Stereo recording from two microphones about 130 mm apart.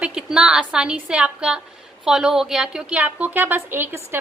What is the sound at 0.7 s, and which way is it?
A woman's voice, 5° right (ahead or behind).